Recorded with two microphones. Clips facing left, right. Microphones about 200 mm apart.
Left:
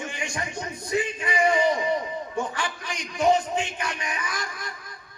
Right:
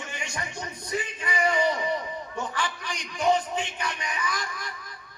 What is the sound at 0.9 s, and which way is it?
Speech, 25° left (ahead or behind).